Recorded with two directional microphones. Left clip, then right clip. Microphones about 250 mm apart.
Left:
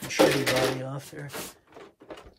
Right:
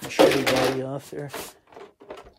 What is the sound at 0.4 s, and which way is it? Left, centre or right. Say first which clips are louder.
Cash register: right 3 dB; centre.